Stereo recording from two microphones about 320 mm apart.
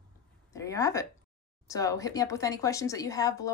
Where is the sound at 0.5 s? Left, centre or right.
Centre.